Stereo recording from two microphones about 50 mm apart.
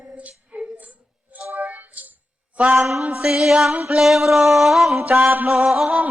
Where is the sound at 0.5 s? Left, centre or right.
Right.